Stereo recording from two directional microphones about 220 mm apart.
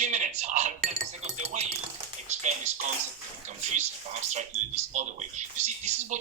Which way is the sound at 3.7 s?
30° right (ahead or behind).